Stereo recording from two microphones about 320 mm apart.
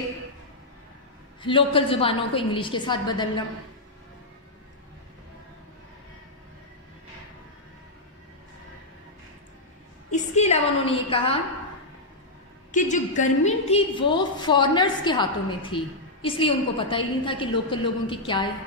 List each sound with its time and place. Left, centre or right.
1.4 s a woman's voice: centre
10.1 s a woman's voice: left
12.7 s a woman's voice: left